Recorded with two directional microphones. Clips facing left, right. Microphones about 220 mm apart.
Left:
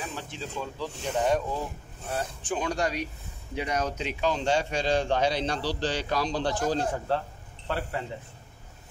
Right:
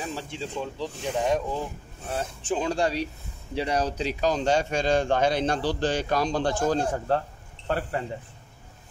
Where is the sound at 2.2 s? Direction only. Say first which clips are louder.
Right 4 dB; 25° right (ahead or behind); by 7.8 s 45° right (ahead or behind).